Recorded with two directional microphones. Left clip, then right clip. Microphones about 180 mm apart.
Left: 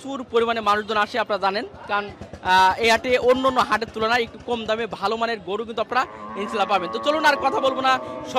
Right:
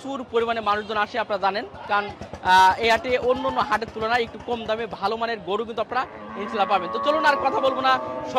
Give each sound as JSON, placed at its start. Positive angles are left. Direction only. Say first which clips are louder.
{"t": 0.1, "sound": "a man's voice", "louder": "left 2 dB", "side_deg": 30}
{"t": 3.6, "sound": "a man's voice", "louder": "left 2 dB", "side_deg": 30}